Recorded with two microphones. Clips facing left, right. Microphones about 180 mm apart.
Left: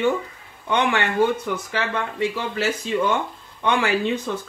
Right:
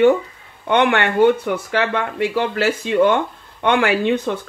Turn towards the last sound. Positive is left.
turn(degrees=-60)  # may be behind; listen again after turning